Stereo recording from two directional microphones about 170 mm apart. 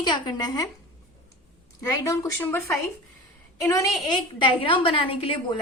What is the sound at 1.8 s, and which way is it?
Speech, 15° left (ahead or behind).